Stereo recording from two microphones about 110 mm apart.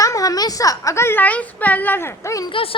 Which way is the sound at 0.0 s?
30° left (ahead or behind).